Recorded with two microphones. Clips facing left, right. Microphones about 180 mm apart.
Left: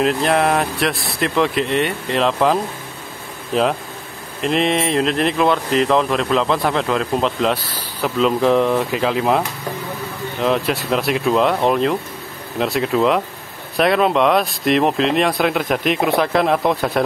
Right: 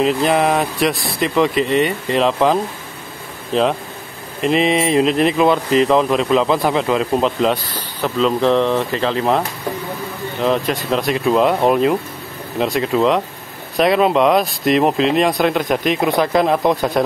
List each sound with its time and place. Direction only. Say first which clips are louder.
0.0 s speech: right 1 dB; centre (ahead or behind)
4.4 s speech: right 2 dB; centre (ahead or behind)
10.4 s speech: right 1 dB; centre (ahead or behind)